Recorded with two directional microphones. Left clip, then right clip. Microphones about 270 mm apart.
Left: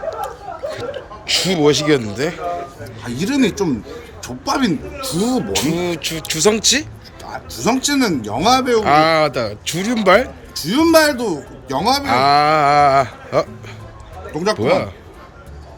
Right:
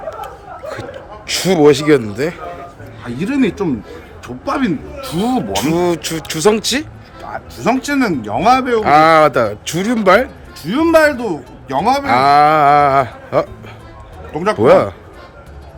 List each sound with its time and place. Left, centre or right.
1.3 s a man's voice: centre
5.5 s speech: centre
14.6 s speech: centre